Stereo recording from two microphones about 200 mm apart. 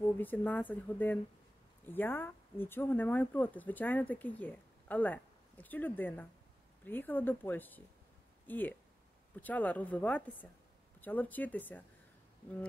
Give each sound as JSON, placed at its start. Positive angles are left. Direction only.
{"t": 0.0, "sound": "speech", "side_deg": 10}